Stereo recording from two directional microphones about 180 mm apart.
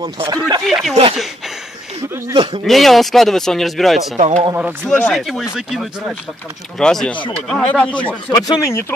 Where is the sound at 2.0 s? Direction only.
15° right (ahead or behind).